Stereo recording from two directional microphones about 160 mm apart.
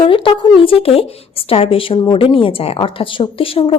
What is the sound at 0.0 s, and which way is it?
Speech, 30° left (ahead or behind).